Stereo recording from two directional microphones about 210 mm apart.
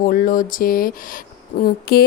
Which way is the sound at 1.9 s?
50° left (ahead or behind).